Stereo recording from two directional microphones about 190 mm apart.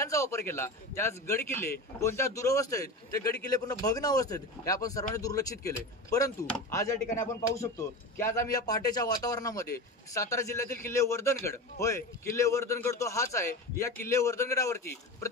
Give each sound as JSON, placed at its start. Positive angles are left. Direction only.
{"t": 0.0, "sound": "a man's voice", "side_deg": 15}